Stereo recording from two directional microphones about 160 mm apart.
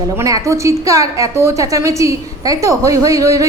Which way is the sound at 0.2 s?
20° right (ahead or behind).